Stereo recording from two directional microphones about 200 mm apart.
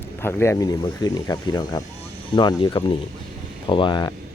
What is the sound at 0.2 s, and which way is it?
Speech, 10° left (ahead or behind).